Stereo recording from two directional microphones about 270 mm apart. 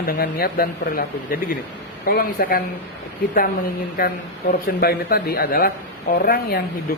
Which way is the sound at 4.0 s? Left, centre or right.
Left.